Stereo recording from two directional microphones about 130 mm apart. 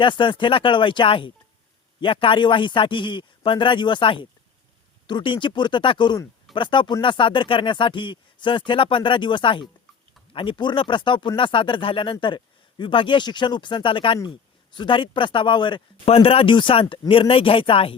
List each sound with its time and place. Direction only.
0.0 s speech: 40° left (ahead or behind)
16.0 s speech: 50° left (ahead or behind)